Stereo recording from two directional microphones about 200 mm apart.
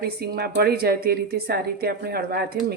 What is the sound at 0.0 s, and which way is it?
A woman's voice, 55° right (ahead or behind).